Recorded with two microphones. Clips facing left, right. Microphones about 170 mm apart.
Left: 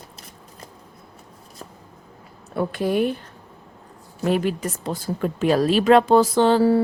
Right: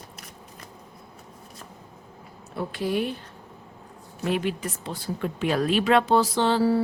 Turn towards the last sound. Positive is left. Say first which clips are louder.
# left 5 dB
turn(degrees=50)  # may be behind; listen again after turning